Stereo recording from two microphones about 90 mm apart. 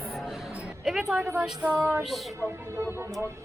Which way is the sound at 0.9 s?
5° right (ahead or behind).